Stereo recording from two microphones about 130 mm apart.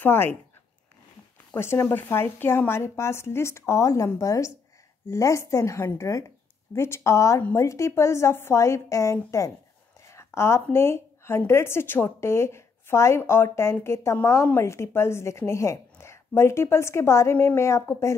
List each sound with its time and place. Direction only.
0.0 s speech: 15° left (ahead or behind)
1.5 s a woman's voice: 20° left (ahead or behind)